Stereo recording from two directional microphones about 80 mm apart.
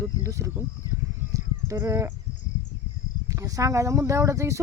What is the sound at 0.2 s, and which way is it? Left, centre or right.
Speech, right.